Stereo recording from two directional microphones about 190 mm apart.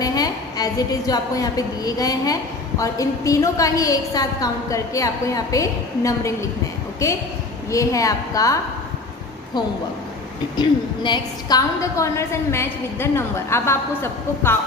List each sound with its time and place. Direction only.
0.0 s a woman's voice: 20° left (ahead or behind)
10.5 s a woman's voice: 25° left (ahead or behind)